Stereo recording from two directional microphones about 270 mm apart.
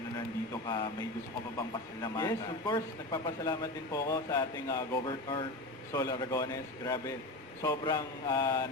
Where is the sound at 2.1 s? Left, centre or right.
Centre.